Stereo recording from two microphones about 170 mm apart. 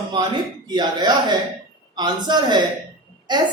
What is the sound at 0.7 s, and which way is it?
Speech, 25° right (ahead or behind).